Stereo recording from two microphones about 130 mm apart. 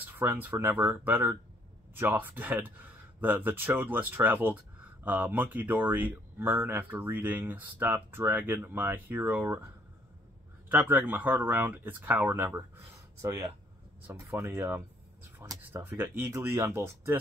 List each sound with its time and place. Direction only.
0.1 s speech: 15° right (ahead or behind)
10.7 s speech: 15° right (ahead or behind)